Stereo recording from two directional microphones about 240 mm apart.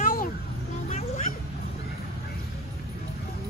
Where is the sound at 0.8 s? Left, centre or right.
Left.